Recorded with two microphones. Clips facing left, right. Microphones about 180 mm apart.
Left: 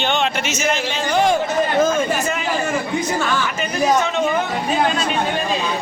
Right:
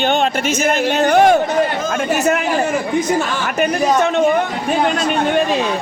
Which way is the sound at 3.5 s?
55° right (ahead or behind).